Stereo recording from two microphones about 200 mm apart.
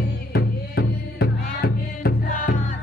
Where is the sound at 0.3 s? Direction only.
55° left (ahead or behind).